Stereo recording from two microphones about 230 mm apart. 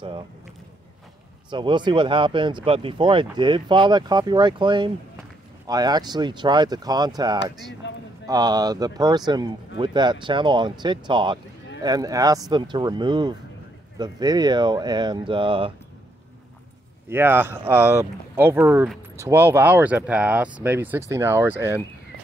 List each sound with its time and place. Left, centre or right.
1.5 s speech: centre
7.8 s speech: left
8.3 s speech: centre
17.1 s speech: centre